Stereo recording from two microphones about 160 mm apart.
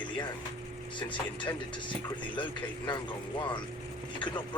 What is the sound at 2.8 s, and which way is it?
Speech, 30° left (ahead or behind).